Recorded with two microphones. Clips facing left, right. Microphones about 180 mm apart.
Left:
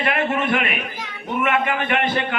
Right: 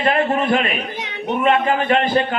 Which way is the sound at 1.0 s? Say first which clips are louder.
Right 6 dB; 70° right (ahead or behind).